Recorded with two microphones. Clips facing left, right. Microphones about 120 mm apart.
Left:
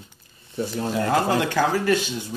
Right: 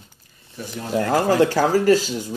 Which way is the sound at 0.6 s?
25° left (ahead or behind).